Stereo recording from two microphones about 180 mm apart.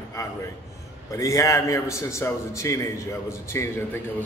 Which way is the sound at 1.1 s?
15° left (ahead or behind).